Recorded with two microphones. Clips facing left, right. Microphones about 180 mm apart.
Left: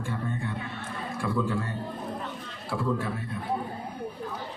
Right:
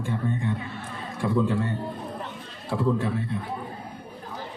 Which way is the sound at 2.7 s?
25° right (ahead or behind).